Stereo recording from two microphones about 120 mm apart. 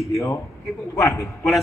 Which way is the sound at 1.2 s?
Centre (ahead or behind).